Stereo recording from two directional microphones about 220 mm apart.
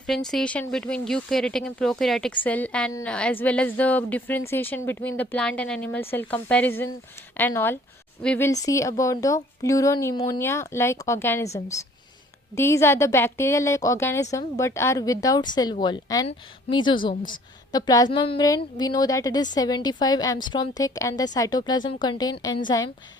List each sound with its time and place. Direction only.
0.1 s a woman's voice: centre (ahead or behind); by 22.9 s 20° left (ahead or behind)